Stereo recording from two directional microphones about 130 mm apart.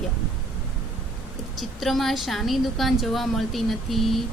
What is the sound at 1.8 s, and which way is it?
A woman's voice, centre (ahead or behind).